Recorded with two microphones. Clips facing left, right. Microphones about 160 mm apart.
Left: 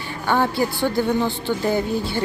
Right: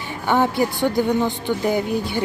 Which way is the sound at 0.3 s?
15° right (ahead or behind).